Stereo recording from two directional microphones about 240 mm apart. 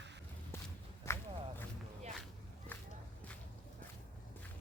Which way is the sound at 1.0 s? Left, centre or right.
Centre.